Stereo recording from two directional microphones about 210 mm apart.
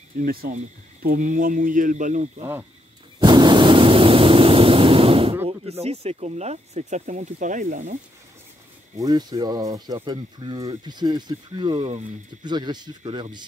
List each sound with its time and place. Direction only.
0.2 s speech: 45° right (ahead or behind)
3.2 s a sound: 20° right (ahead or behind)
5.5 s speech: 30° right (ahead or behind)
8.9 s speech: 20° right (ahead or behind)
12.4 s speech: 20° right (ahead or behind)